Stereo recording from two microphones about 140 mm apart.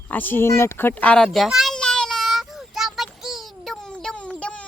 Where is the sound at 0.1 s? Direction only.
15° left (ahead or behind).